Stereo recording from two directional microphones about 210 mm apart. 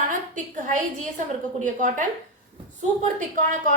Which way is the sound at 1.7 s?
35° right (ahead or behind).